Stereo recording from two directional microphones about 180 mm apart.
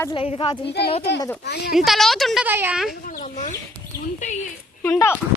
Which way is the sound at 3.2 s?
40° left (ahead or behind).